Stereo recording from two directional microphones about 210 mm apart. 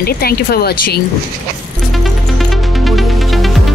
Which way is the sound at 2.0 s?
Centre (ahead or behind).